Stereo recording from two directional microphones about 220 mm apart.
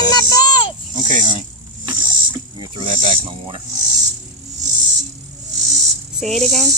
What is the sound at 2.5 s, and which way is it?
Speech, 20° right (ahead or behind).